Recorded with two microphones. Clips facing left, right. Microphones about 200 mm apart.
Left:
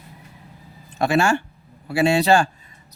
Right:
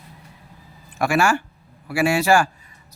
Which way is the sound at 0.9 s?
20° left (ahead or behind).